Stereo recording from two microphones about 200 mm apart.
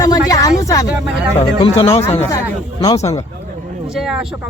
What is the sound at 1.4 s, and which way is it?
Speech, 25° left (ahead or behind).